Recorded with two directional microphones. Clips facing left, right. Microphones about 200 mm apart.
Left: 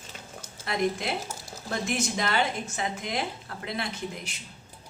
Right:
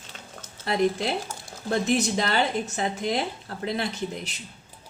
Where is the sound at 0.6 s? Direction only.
30° right (ahead or behind).